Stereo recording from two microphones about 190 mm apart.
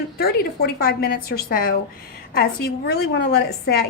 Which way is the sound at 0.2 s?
55° left (ahead or behind).